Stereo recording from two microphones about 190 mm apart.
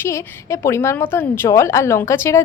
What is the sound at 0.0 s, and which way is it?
A woman's voice, 15° left (ahead or behind).